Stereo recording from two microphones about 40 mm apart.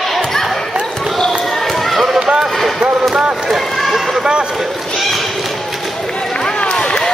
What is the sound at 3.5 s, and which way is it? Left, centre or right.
Run, centre.